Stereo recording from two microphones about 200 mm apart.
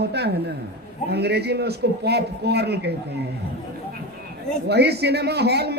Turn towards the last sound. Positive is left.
turn(degrees=-55)  # may be behind; listen again after turning